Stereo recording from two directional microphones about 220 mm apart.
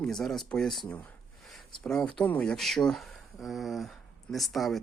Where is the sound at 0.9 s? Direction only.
5° left (ahead or behind).